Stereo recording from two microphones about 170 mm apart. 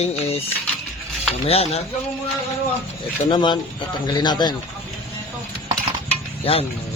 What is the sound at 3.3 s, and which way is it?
Speech, 30° left (ahead or behind).